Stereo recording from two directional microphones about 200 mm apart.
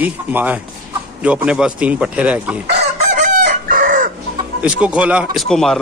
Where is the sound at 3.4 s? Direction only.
40° right (ahead or behind).